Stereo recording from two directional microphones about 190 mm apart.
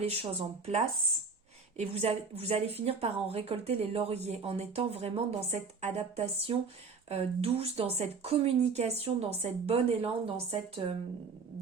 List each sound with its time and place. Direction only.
0.0 s speech: 30° right (ahead or behind)